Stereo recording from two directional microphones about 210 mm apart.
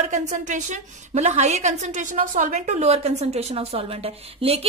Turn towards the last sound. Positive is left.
turn(degrees=-30)  # may be behind; listen again after turning